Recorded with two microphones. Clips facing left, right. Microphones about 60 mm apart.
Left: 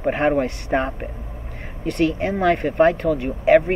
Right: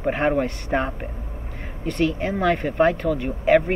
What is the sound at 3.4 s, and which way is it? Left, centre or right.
Speech, centre.